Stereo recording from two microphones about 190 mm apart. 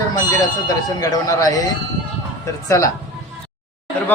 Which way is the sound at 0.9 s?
20° left (ahead or behind).